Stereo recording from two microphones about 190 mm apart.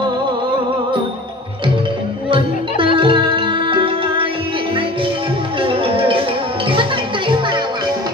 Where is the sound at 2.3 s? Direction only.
30° right (ahead or behind).